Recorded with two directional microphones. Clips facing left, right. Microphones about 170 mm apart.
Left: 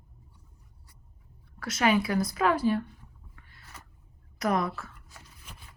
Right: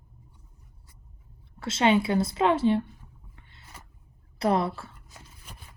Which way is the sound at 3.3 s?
25° right (ahead or behind).